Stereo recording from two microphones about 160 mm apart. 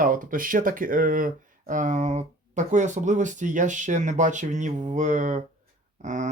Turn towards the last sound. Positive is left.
turn(degrees=-50)  # may be behind; listen again after turning